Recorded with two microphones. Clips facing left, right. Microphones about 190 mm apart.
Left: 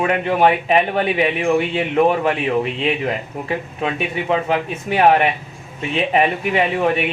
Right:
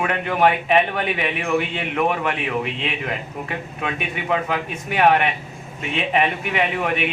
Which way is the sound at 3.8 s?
25° left (ahead or behind).